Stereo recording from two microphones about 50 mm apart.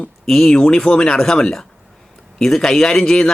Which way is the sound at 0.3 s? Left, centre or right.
Centre.